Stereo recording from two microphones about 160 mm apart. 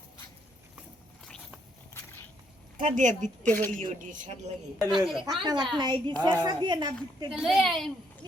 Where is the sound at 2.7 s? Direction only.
50° right (ahead or behind).